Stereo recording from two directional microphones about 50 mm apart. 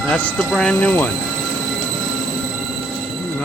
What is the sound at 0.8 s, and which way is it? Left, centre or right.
Speech, left.